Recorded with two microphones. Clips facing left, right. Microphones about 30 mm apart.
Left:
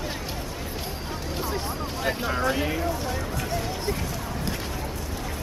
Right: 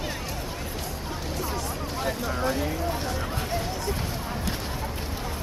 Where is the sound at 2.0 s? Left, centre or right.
Left.